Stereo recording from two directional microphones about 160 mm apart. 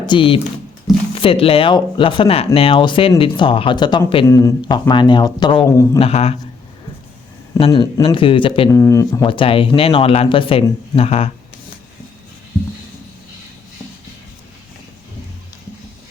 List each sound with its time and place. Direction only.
0.0 s speech: 30° left (ahead or behind)
4.3 s speech: 20° left (ahead or behind)
6.0 s speech: 40° left (ahead or behind)
7.6 s speech: 35° left (ahead or behind)
8.7 s speech: 15° left (ahead or behind)
9.2 s speech: 30° left (ahead or behind)